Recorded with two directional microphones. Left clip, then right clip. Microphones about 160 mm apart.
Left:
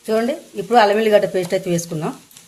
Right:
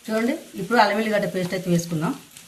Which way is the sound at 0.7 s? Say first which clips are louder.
Left 6 dB; 50° left (ahead or behind).